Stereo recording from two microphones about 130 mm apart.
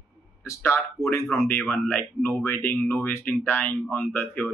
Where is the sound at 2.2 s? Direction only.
15° left (ahead or behind).